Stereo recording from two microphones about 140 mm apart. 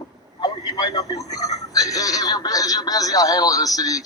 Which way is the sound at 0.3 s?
30° left (ahead or behind).